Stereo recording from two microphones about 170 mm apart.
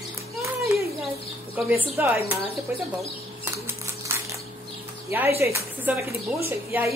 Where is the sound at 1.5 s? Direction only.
10° right (ahead or behind).